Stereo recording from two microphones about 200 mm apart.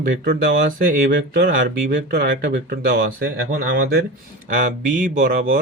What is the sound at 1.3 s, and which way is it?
Speech, 45° right (ahead or behind).